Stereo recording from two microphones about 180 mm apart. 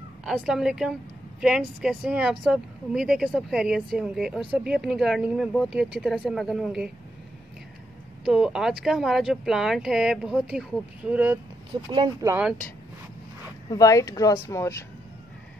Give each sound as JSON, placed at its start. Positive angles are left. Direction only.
{"t": 0.2, "sound": "speech", "side_deg": -5}
{"t": 8.3, "sound": "speech", "side_deg": -5}
{"t": 11.7, "sound": "speech", "side_deg": -25}
{"t": 12.3, "sound": "speech", "side_deg": -10}
{"t": 13.7, "sound": "speech", "side_deg": 20}